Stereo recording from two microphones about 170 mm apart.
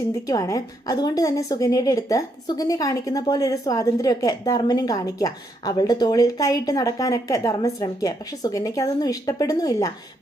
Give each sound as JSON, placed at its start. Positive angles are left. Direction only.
{"t": 0.3, "sound": "a woman's voice", "side_deg": 20}